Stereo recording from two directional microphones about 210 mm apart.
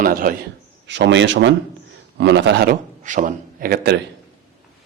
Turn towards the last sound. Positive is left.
turn(degrees=-45)  # may be behind; listen again after turning